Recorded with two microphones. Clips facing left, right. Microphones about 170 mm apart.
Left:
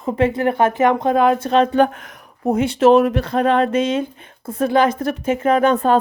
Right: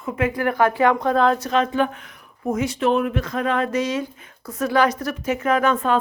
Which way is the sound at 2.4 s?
30° left (ahead or behind).